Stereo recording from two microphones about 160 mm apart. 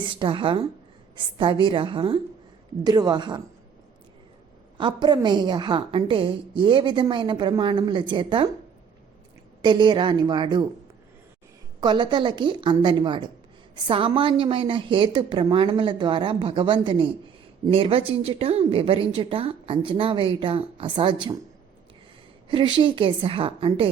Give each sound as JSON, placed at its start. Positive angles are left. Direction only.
{"t": 0.0, "sound": "a woman's voice", "side_deg": -30}
{"t": 4.8, "sound": "a woman's voice", "side_deg": -30}
{"t": 9.6, "sound": "a woman's voice", "side_deg": -30}
{"t": 11.8, "sound": "a woman's voice", "side_deg": -25}
{"t": 22.4, "sound": "a woman's voice", "side_deg": -30}